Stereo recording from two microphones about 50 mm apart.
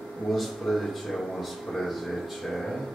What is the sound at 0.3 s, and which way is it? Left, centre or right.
Speech, centre.